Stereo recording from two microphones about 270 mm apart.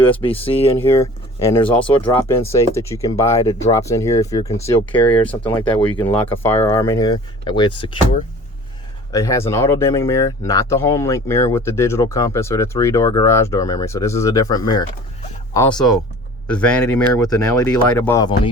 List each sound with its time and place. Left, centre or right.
0.0 s speech: centre
5.5 s speech: centre
6.1 s speech: centre